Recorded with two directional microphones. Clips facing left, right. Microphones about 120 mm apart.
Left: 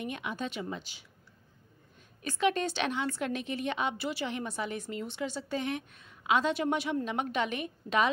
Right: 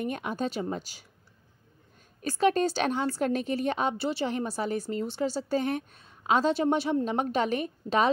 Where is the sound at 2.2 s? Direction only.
40° right (ahead or behind).